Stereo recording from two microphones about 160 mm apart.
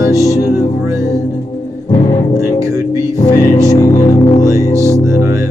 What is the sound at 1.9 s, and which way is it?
Music, 30° left (ahead or behind).